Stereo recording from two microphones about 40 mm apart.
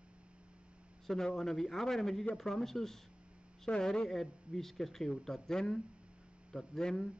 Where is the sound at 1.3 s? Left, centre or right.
Centre.